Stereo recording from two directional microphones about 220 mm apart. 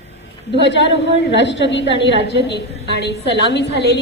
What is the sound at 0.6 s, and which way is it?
A woman's voice, 55° left (ahead or behind).